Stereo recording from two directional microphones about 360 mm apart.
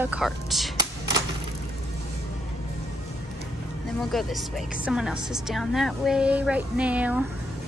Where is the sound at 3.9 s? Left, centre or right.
Centre.